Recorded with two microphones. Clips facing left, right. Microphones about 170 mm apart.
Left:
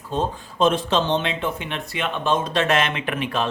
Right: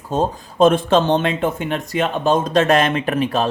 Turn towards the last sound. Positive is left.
turn(degrees=-40)  # may be behind; listen again after turning